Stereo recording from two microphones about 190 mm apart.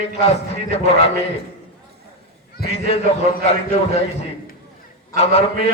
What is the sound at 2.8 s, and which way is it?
Speech, 30° left (ahead or behind).